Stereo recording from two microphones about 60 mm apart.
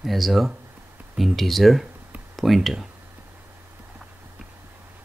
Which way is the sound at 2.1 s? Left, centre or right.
Right.